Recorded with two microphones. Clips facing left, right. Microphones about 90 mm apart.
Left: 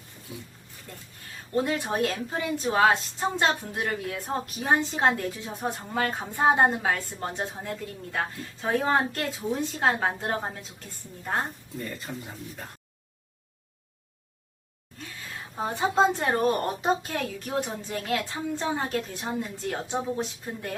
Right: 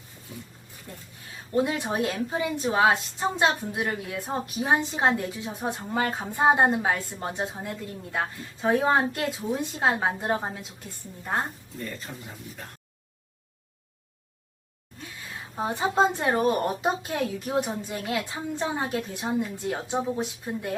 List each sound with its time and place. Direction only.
0.3 s speech: 5° left (ahead or behind)
1.5 s a woman's voice: 15° right (ahead or behind)
11.8 s speech: 5° left (ahead or behind)
15.8 s a woman's voice: 10° right (ahead or behind)